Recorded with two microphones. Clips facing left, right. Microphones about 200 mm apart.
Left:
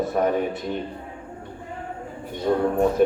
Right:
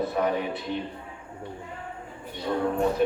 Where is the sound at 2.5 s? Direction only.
45° left (ahead or behind).